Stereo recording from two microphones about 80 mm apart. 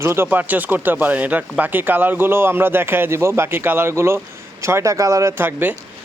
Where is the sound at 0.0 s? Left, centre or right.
Right.